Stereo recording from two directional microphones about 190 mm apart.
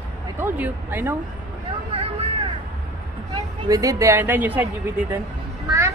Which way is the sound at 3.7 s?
15° right (ahead or behind).